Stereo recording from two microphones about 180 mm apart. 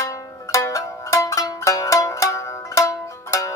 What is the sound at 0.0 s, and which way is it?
Zither, 20° left (ahead or behind).